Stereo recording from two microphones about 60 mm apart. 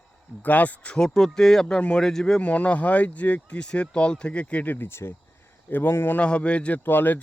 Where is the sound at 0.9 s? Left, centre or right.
Centre.